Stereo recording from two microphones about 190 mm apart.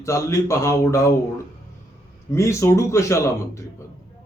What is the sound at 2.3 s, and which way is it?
A man's voice, 15° left (ahead or behind).